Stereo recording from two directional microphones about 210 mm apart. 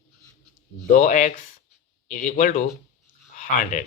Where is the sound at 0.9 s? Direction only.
35° left (ahead or behind).